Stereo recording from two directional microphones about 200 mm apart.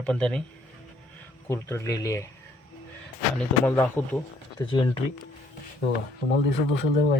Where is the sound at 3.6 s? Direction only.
10° left (ahead or behind).